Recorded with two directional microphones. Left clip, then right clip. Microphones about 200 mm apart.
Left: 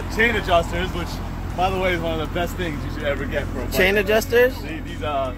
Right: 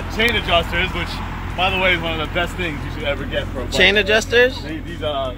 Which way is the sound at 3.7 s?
Centre (ahead or behind).